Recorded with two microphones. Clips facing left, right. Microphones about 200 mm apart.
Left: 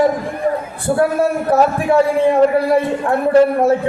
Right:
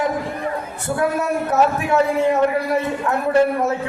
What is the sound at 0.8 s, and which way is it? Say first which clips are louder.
A man's voice: left 5 dB; 30° left (ahead or behind).